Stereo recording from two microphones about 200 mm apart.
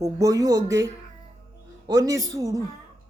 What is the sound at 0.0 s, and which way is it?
Speech, 15° right (ahead or behind).